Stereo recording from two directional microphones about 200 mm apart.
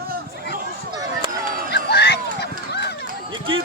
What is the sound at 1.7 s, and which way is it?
Clip-clop, 55° left (ahead or behind).